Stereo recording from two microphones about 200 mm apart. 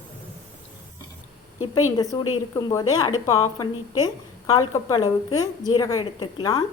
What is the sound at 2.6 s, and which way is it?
Speech, 15° left (ahead or behind).